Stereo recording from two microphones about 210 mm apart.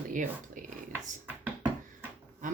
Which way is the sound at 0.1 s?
40° right (ahead or behind).